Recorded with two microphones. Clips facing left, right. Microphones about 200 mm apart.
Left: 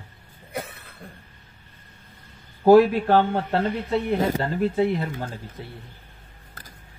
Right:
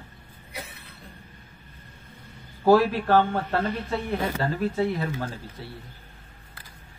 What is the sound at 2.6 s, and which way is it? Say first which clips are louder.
A man's voice: left 5 dB; 20° left (ahead or behind).